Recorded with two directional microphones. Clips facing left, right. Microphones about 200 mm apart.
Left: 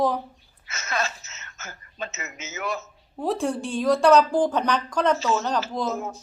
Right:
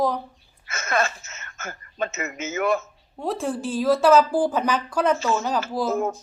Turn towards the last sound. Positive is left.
turn(degrees=-55)  # may be behind; listen again after turning